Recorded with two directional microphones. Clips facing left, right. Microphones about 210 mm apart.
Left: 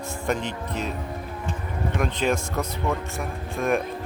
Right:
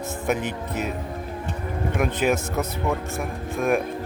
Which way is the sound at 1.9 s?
5° right (ahead or behind).